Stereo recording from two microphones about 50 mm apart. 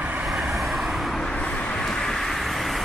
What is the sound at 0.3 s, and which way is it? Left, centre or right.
Vehicle, centre.